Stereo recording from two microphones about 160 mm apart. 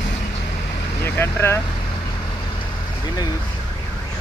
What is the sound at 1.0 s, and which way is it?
Speech, 15° left (ahead or behind).